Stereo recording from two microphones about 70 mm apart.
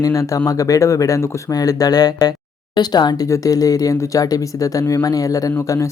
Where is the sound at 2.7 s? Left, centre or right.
Left.